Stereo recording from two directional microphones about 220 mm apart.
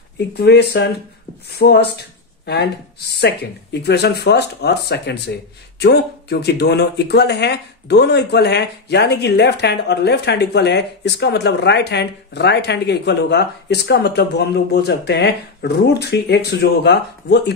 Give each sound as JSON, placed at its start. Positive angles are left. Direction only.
{"t": 0.3, "sound": "speech", "side_deg": 50}